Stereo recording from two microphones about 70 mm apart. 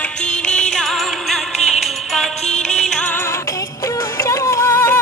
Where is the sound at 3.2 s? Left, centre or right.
Left.